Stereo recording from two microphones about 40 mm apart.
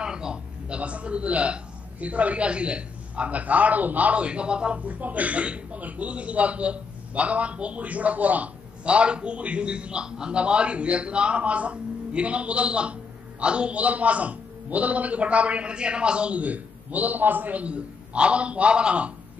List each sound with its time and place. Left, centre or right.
0.0 s a man's voice: centre
4.7 s a man's voice: right